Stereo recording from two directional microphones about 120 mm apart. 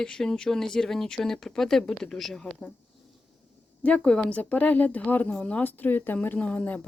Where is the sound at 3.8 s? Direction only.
10° left (ahead or behind).